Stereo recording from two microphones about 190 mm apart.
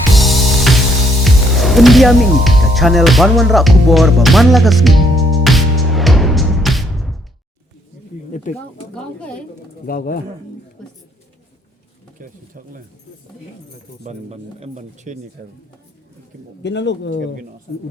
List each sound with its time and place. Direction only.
0.1 s music: centre (ahead or behind)
8.3 s speech: 40° left (ahead or behind)
9.0 s speech: 5° left (ahead or behind)
9.8 s speech: 50° left (ahead or behind)
12.2 s speech: 45° right (ahead or behind)
14.0 s speech: 35° right (ahead or behind)
16.6 s speech: 65° left (ahead or behind)